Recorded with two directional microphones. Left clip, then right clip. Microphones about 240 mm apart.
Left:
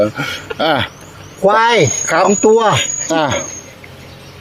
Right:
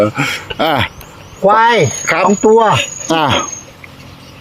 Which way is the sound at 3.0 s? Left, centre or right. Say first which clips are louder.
Right 4 dB; right.